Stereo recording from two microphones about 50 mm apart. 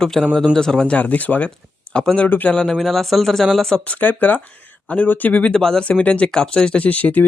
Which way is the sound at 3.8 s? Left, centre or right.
Left.